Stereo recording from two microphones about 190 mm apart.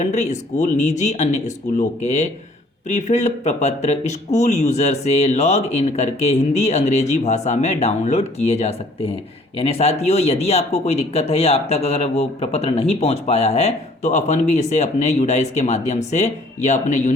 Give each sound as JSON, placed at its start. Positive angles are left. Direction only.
{"t": 0.0, "sound": "speech", "side_deg": 35}